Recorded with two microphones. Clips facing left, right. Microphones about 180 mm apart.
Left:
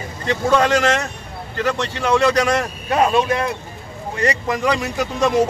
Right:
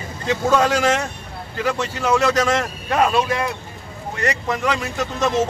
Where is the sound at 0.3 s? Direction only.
5° right (ahead or behind).